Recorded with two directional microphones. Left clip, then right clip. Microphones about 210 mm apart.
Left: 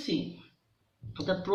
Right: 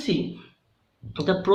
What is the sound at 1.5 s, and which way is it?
Speech, 50° right (ahead or behind).